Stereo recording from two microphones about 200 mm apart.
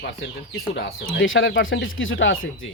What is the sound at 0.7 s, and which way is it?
A man's voice, 60° left (ahead or behind).